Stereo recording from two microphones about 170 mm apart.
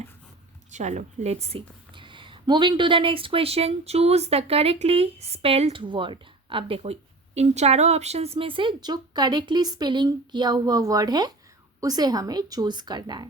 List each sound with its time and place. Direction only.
0.7 s a woman's voice: 45° right (ahead or behind); by 13.2 s 25° right (ahead or behind)